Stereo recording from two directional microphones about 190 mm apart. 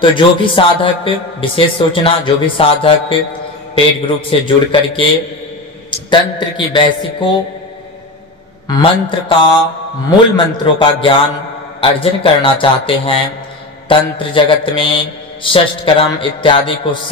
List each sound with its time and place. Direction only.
0.0 s a man's voice: 25° left (ahead or behind)
8.6 s a man's voice: 25° left (ahead or behind)